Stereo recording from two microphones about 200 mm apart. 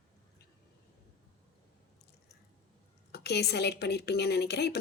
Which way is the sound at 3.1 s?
55° left (ahead or behind).